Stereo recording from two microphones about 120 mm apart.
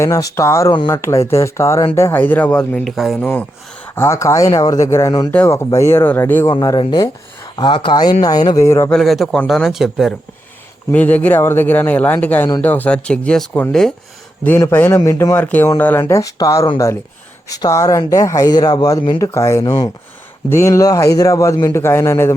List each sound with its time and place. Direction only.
0.0 s speech: 25° left (ahead or behind)
0.7 s speech: 35° left (ahead or behind)
1.0 s speech: 25° left (ahead or behind)
2.8 s speech: centre (ahead or behind)
3.2 s speech: 15° left (ahead or behind)
3.9 s speech: 25° left (ahead or behind)
6.5 s speech: 40° left (ahead or behind)
8.6 s speech: 20° left (ahead or behind)
8.9 s speech: centre (ahead or behind)
10.9 s speech: 15° left (ahead or behind)
14.4 s speech: 20° left (ahead or behind)
15.4 s speech: 15° left (ahead or behind)